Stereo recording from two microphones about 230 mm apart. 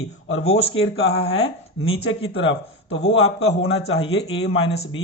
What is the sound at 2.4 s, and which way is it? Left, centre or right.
Speech, left.